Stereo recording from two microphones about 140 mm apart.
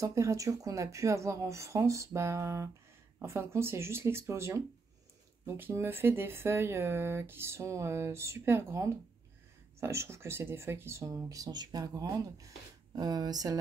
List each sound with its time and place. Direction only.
0.0 s speech: 20° right (ahead or behind)